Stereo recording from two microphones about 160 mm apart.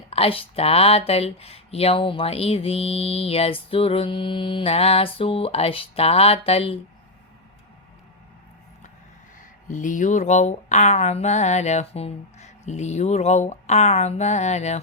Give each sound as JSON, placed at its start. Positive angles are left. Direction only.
{"t": 0.1, "sound": "speech", "side_deg": 35}
{"t": 9.6, "sound": "speech", "side_deg": 55}